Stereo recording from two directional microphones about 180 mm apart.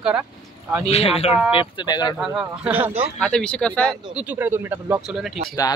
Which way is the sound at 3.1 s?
5° left (ahead or behind).